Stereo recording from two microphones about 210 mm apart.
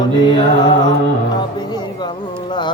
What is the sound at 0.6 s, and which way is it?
Music, 20° left (ahead or behind).